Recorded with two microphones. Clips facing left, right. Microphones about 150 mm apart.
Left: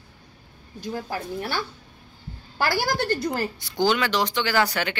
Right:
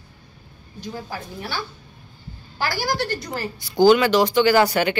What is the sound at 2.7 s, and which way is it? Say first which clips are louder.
Speech: left 1 dB; 55° left (ahead or behind).